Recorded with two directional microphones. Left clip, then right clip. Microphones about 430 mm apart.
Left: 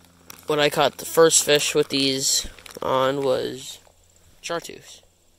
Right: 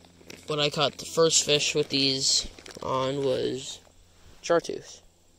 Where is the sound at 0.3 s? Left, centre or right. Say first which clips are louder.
Left 7 dB; centre.